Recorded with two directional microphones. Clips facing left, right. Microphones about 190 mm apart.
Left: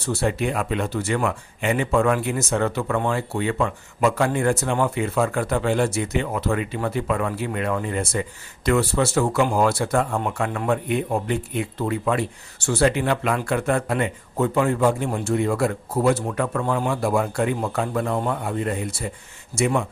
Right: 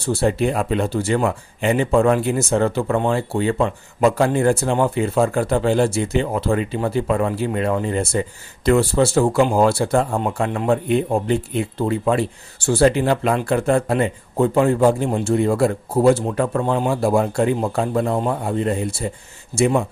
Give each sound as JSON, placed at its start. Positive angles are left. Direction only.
{"t": 0.0, "sound": "a man's voice", "side_deg": -30}